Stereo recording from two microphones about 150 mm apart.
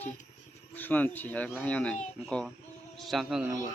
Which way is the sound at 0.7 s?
10° left (ahead or behind).